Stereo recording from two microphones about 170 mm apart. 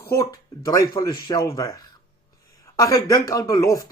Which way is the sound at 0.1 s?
20° left (ahead or behind).